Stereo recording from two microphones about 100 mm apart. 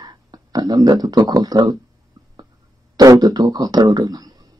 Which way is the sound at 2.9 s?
40° right (ahead or behind).